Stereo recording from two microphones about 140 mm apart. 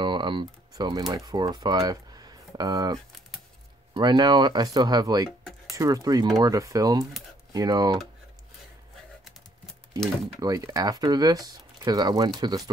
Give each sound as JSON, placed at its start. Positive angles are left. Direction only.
{"t": 0.0, "sound": "typing", "side_deg": -35}
{"t": 1.1, "sound": "speech", "side_deg": -30}
{"t": 10.4, "sound": "speech", "side_deg": -25}